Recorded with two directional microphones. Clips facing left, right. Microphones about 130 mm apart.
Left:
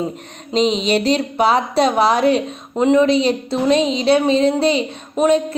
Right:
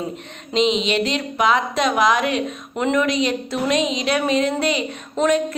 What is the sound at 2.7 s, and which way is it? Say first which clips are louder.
A woman's voice: left 6 dB; 25° left (ahead or behind).